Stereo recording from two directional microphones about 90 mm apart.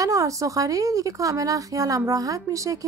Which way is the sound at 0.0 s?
40° right (ahead or behind).